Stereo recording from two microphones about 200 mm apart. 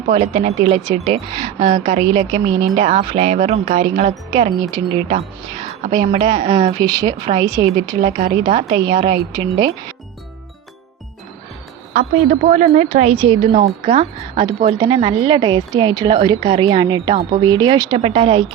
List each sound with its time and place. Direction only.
0.0 s a woman's voice: 35° right (ahead or behind)
6.6 s speech: 30° right (ahead or behind)
6.8 s a woman's voice: 20° right (ahead or behind)
8.0 s a woman's voice: 30° right (ahead or behind)
11.9 s a woman's voice: 40° right (ahead or behind)